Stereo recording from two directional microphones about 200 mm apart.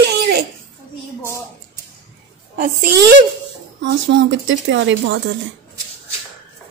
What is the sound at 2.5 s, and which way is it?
Speech, 50° right (ahead or behind).